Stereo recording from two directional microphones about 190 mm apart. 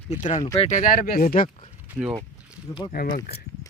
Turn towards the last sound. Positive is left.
turn(degrees=45)  # may be behind; listen again after turning